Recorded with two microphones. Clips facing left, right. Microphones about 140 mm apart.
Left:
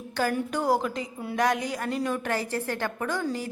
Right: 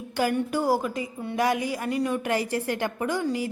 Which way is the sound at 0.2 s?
10° right (ahead or behind).